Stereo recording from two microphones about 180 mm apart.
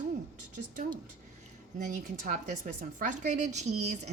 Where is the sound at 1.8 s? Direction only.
45° right (ahead or behind).